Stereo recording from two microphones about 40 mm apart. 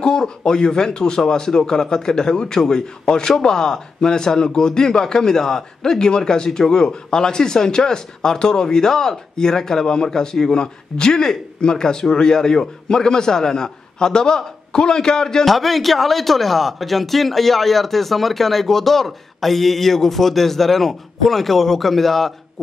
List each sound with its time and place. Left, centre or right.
0.4 s speech: centre
15.4 s a man's voice: centre